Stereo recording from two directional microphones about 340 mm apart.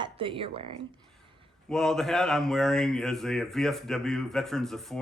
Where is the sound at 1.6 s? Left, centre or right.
Centre.